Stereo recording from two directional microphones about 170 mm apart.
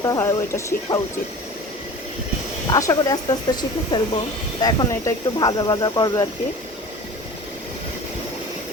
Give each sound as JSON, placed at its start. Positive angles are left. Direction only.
{"t": 0.0, "sound": "speech", "side_deg": 20}
{"t": 2.6, "sound": "speech", "side_deg": 20}